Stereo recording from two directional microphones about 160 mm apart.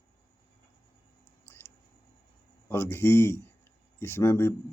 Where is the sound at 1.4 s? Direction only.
15° left (ahead or behind).